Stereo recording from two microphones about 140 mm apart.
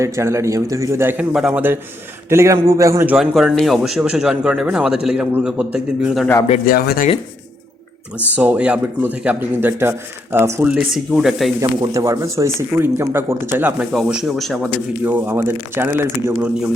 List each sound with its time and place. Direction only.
0.0 s speech: 20° right (ahead or behind)
3.1 s speech: 5° right (ahead or behind)
6.7 s speech: 90° left
8.4 s speech: 10° right (ahead or behind)
10.8 s speech: 5° right (ahead or behind)
11.8 s speech: 25° right (ahead or behind)
13.9 s speech: centre (ahead or behind)
15.0 s speech: 15° right (ahead or behind)